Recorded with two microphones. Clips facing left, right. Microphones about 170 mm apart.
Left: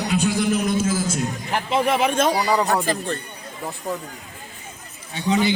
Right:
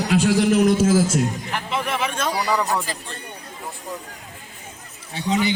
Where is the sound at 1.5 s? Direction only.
40° left (ahead or behind).